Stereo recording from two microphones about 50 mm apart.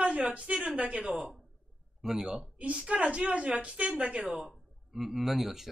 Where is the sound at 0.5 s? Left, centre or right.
Right.